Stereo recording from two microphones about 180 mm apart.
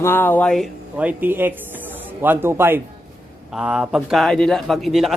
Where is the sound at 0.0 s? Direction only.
10° left (ahead or behind).